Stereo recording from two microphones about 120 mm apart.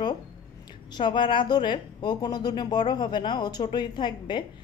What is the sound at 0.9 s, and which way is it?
Speech, 40° left (ahead or behind).